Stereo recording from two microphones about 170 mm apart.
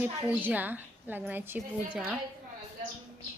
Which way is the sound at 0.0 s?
10° right (ahead or behind).